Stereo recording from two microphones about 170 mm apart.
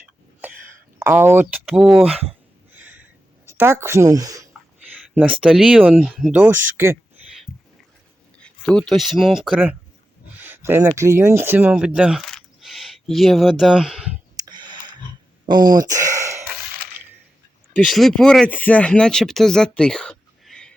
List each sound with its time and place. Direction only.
0.9 s speech: 15° right (ahead or behind)
2.7 s a sound: 10° right (ahead or behind)
3.4 s speech: 15° right (ahead or behind)
5.4 s speech: centre (ahead or behind)
7.5 s dog: 25° left (ahead or behind)
8.4 s speech: 5° left (ahead or behind)
14.4 s a sound: 25° right (ahead or behind)
15.4 s speech: 25° right (ahead or behind)
17.7 s speech: centre (ahead or behind)